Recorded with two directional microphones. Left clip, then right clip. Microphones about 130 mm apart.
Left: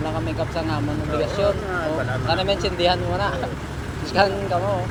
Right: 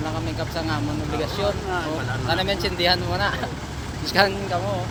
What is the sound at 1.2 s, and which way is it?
Speech, 20° right (ahead or behind).